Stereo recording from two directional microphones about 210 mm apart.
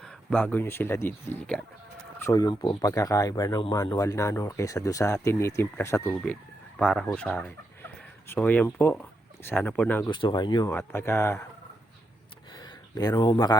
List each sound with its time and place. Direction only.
0.0 s speech: 5° left (ahead or behind)
10.1 s speech: 20° left (ahead or behind)
10.7 s speech: 10° left (ahead or behind)
12.5 s a sound: 20° left (ahead or behind)